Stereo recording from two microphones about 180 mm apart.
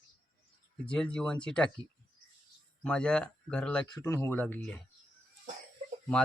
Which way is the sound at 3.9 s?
20° left (ahead or behind).